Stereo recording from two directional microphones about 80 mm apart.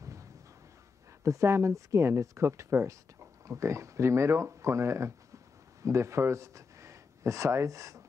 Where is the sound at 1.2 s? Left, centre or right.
Right.